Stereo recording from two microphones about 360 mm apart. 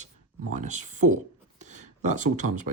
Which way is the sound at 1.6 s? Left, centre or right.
Centre.